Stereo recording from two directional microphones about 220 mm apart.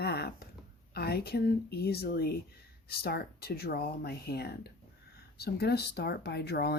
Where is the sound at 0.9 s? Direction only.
45° left (ahead or behind).